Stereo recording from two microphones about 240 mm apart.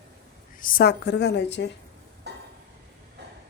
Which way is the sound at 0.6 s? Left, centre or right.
Left.